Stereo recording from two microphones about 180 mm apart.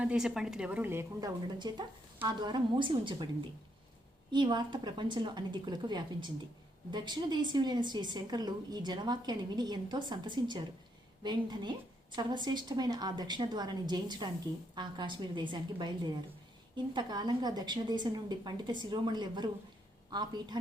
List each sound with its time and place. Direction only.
0.0 s a woman's voice: 5° right (ahead or behind)
1.5 s a woman's voice: 25° right (ahead or behind)
4.3 s a woman's voice: 25° right (ahead or behind)